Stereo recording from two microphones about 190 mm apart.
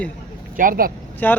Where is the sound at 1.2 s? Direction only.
10° left (ahead or behind).